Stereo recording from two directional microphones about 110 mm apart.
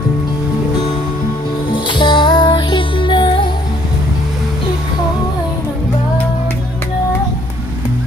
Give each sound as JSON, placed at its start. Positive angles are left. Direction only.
{"t": 1.7, "sound": "music", "side_deg": 45}